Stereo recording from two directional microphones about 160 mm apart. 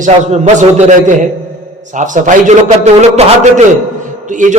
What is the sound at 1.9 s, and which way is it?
A man's voice, 50° right (ahead or behind).